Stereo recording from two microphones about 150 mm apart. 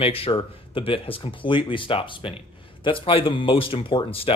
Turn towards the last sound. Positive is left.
turn(degrees=35)  # may be behind; listen again after turning